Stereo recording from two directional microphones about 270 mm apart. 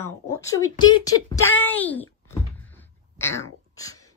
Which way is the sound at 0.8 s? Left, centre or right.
Centre.